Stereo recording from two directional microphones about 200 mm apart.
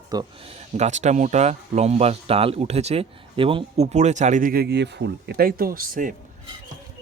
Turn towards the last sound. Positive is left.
turn(degrees=-45)  # may be behind; listen again after turning